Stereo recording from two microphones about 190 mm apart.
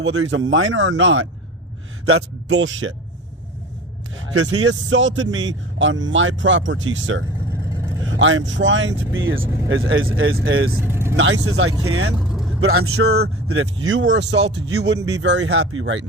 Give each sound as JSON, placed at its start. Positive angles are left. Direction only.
{"t": 0.0, "sound": "a man's voice", "side_deg": -90}
{"t": 4.4, "sound": "a man's voice", "side_deg": -75}
{"t": 7.5, "sound": "vehicle", "side_deg": -15}
{"t": 8.1, "sound": "a man's voice", "side_deg": -90}
{"t": 10.8, "sound": "speech", "side_deg": -10}
{"t": 11.2, "sound": "a man's voice", "side_deg": -85}
{"t": 12.2, "sound": "vehicle", "side_deg": 0}
{"t": 12.5, "sound": "speech", "side_deg": -90}
{"t": 15.2, "sound": "speech", "side_deg": -75}